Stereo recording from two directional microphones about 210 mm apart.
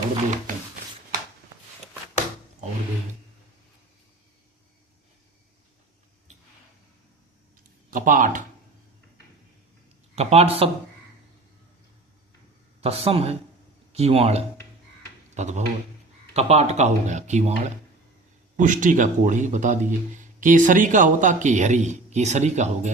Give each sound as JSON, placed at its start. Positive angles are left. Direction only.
{"t": 0.5, "sound": "a sound", "side_deg": -40}
{"t": 7.9, "sound": "speech", "side_deg": -40}
{"t": 10.2, "sound": "speech", "side_deg": -30}
{"t": 12.8, "sound": "speech", "side_deg": -30}
{"t": 18.5, "sound": "speech", "side_deg": -40}